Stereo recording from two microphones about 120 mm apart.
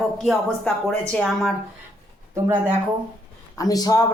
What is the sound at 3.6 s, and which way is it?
Speech, 30° left (ahead or behind).